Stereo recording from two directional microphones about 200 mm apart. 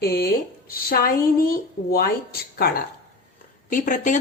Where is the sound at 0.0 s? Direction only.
50° left (ahead or behind).